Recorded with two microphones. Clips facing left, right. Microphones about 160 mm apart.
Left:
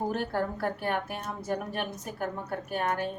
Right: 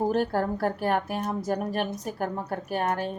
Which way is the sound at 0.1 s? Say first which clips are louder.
Right 5 dB; 40° right (ahead or behind).